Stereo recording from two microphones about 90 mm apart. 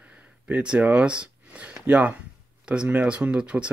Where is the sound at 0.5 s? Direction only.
15° right (ahead or behind).